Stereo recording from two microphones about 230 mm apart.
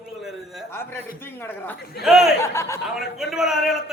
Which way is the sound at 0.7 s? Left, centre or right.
Centre.